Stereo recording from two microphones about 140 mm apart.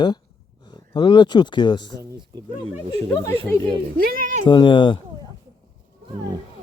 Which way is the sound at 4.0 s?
90° right.